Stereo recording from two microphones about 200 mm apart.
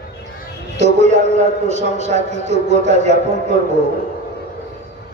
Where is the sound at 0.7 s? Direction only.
35° right (ahead or behind).